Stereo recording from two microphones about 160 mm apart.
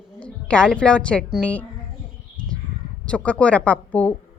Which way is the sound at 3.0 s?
10° left (ahead or behind).